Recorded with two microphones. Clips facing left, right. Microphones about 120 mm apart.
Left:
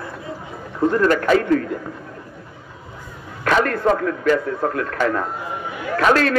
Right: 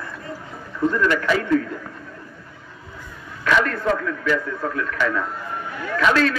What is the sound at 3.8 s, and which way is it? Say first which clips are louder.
A man's voice: left 4 dB; 40° left (ahead or behind).